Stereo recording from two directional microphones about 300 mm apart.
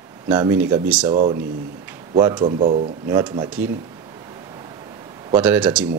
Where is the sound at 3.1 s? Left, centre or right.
Centre.